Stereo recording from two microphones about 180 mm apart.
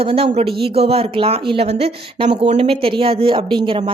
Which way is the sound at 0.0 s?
30° right (ahead or behind).